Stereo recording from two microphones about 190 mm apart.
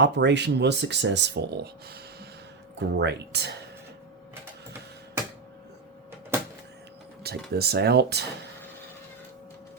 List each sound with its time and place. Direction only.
0.0 s speech: 65° right (ahead or behind)
7.2 s speech: 55° right (ahead or behind)